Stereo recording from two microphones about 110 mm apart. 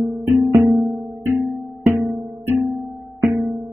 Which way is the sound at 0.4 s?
30° right (ahead or behind).